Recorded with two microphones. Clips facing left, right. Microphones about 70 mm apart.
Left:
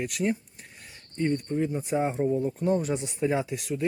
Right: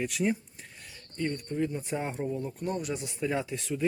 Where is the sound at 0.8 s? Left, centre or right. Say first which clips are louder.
Left 4 dB; centre.